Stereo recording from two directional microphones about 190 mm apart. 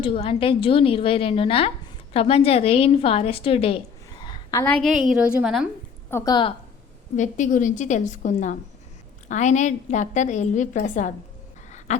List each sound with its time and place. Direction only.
0.0 s a woman's voice: 30° left (ahead or behind)
4.6 s a woman's voice: 5° left (ahead or behind)
6.1 s a woman's voice: 15° left (ahead or behind)
7.2 s a woman's voice: 40° left (ahead or behind)
11.9 s a sound: 40° left (ahead or behind)